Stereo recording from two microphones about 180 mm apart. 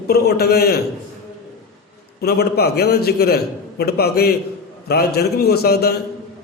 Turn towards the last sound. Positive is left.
turn(degrees=60)  # may be behind; listen again after turning